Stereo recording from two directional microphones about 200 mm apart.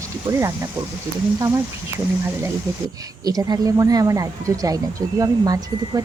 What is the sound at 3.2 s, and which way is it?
Speech, 20° right (ahead or behind).